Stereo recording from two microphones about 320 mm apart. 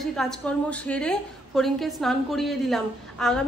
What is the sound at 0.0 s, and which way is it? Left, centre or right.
A woman's voice, centre.